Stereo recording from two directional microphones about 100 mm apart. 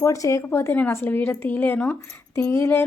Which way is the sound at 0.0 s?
30° left (ahead or behind).